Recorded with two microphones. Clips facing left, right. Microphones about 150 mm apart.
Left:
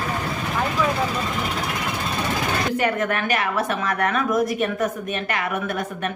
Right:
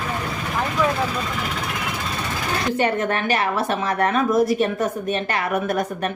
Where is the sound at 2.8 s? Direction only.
30° right (ahead or behind).